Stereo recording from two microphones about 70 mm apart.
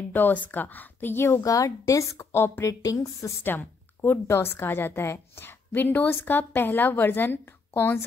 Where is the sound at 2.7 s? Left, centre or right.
Left.